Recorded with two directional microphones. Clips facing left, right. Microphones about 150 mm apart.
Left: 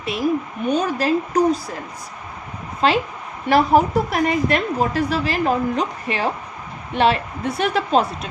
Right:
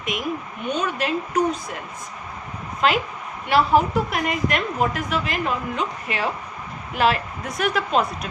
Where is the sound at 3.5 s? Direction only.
40° left (ahead or behind).